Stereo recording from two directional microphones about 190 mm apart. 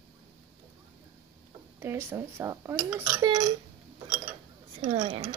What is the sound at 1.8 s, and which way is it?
Speech, 10° right (ahead or behind).